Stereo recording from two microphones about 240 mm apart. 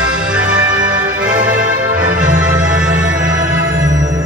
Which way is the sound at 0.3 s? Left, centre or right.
Centre.